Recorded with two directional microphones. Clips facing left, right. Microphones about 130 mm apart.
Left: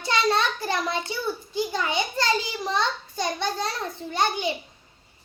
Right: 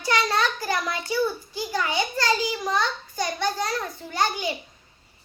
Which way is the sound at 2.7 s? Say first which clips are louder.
Even; 25° left (ahead or behind).